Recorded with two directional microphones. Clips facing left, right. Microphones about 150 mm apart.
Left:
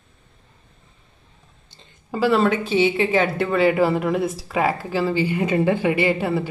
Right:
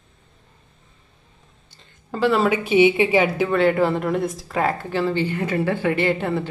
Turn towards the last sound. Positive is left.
turn(degrees=5)  # may be behind; listen again after turning